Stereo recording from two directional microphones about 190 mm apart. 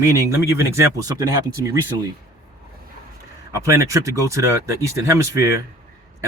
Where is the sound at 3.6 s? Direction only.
15° right (ahead or behind).